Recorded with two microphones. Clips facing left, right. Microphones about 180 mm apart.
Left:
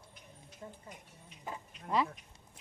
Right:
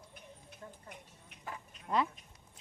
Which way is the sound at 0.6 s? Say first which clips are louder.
Left 3 dB; 20° left (ahead or behind).